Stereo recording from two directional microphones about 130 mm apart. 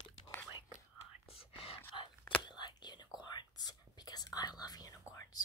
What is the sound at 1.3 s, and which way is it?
Whispering, 45° left (ahead or behind).